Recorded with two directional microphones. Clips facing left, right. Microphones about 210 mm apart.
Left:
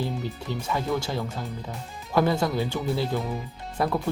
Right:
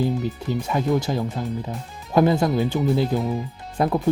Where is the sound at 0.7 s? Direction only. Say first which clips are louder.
Right 5 dB; 20° right (ahead or behind).